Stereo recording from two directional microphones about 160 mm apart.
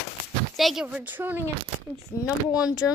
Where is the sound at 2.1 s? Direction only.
15° left (ahead or behind).